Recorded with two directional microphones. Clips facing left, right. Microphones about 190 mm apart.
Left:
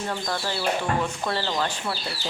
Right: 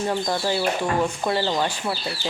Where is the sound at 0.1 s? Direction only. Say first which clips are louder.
Right 5 dB; 15° right (ahead or behind).